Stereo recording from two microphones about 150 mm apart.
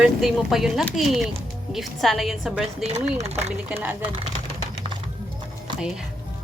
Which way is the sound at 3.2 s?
45° right (ahead or behind).